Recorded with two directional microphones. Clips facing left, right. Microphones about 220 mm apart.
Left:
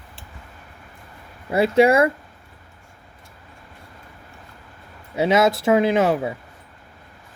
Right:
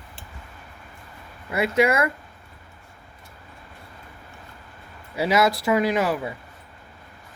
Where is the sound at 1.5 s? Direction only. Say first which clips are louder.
Left 5 dB; 30° left (ahead or behind).